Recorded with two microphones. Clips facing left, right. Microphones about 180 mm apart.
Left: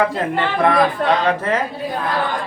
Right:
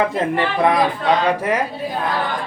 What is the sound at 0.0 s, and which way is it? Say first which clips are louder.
Speech: even; 20° right (ahead or behind).